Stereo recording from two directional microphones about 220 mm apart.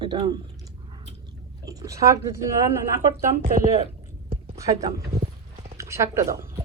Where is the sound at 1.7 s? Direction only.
15° right (ahead or behind).